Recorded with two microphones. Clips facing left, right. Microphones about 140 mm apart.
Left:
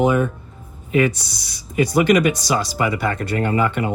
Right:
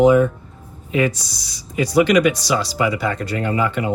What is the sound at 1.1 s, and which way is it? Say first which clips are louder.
Speech: even; 60° left (ahead or behind).